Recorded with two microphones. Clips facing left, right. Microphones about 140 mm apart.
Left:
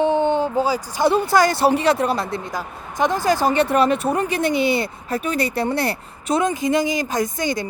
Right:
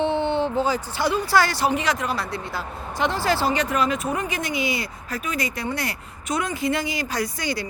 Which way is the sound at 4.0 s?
35° left (ahead or behind).